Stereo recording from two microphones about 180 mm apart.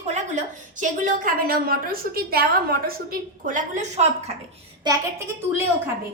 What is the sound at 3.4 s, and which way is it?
Speech, 45° right (ahead or behind).